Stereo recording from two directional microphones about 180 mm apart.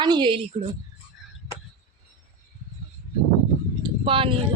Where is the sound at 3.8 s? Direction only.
30° right (ahead or behind).